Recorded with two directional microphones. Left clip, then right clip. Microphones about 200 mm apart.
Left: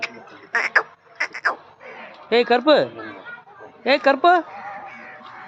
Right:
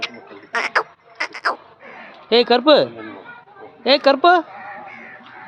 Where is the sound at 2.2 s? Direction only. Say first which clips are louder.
Right 3 dB; 20° right (ahead or behind).